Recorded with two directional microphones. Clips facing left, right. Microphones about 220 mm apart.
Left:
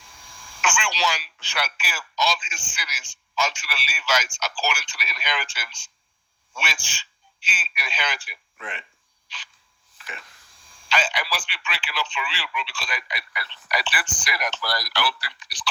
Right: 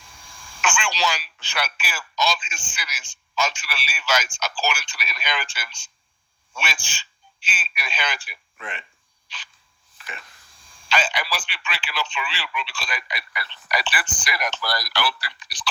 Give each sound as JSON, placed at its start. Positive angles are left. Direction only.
{"t": 0.6, "sound": "a man's voice", "side_deg": -50}
{"t": 10.0, "sound": "a sound", "side_deg": -50}
{"t": 10.8, "sound": "speech", "side_deg": -50}